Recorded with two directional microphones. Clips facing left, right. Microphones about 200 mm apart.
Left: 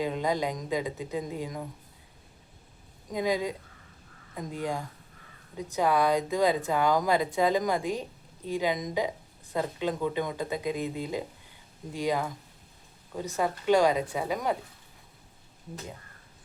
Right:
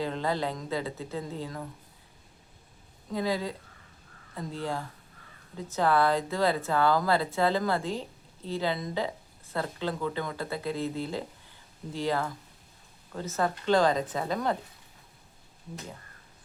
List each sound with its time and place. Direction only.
0.0 s speech: 15° left (ahead or behind)
3.1 s speech: 15° left (ahead or behind)